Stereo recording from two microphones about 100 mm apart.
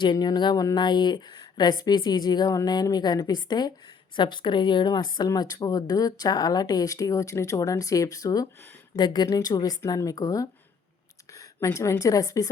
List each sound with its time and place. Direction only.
0.0 s a woman's voice: 45° left (ahead or behind)